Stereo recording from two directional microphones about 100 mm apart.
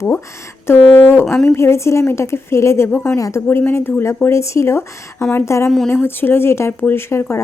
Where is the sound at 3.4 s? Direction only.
20° left (ahead or behind).